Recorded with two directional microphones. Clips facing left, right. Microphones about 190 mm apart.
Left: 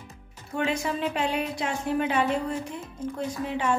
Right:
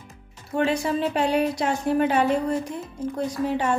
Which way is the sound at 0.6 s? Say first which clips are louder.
Right 5 dB; 35° right (ahead or behind).